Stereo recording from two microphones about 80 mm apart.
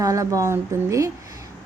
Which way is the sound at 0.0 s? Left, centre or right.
Right.